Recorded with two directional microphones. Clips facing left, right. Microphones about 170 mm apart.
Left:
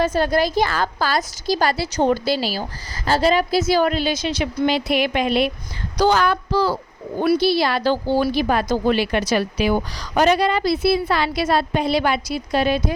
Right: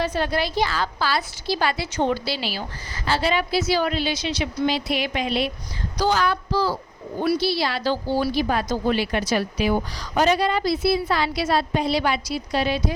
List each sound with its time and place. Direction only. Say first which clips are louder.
0.0 s a woman's voice: left 5 dB; 45° left (ahead or behind)